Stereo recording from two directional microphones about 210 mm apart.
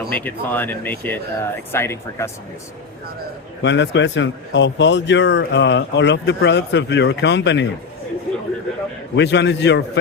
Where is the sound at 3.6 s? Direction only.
60° left (ahead or behind).